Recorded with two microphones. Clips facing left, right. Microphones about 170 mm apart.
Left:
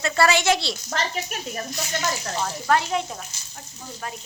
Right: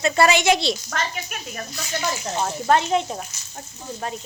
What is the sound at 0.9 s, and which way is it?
Speech, 30° left (ahead or behind).